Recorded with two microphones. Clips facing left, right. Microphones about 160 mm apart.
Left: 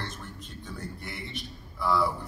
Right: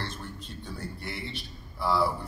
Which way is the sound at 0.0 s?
30° right (ahead or behind).